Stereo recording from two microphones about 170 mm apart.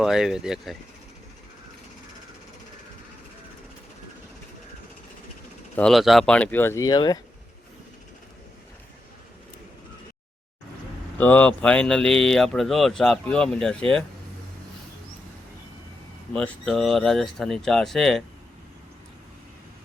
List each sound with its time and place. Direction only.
0.0 s speech: centre (ahead or behind)
5.7 s speech: centre (ahead or behind); by 7.2 s 25° left (ahead or behind)
11.2 s speech: 10° left (ahead or behind)
16.3 s speech: 5° left (ahead or behind)